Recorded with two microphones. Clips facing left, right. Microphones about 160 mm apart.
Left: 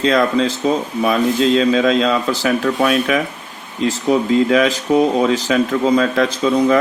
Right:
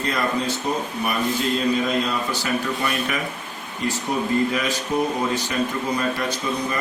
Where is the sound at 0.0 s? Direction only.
90° left.